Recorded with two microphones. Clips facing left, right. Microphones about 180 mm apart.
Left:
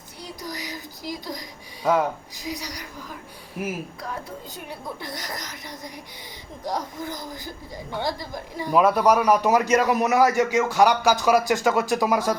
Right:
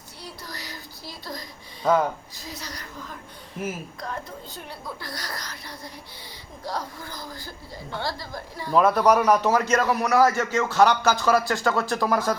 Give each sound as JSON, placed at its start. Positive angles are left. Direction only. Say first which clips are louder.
{"t": 0.4, "sound": "speech", "louder": "left 5 dB", "side_deg": 15}
{"t": 4.5, "sound": "a woman's voice", "louder": "left 2 dB", "side_deg": 20}